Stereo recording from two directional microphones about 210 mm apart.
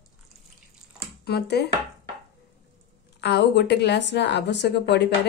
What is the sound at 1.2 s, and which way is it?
Speech, 50° left (ahead or behind).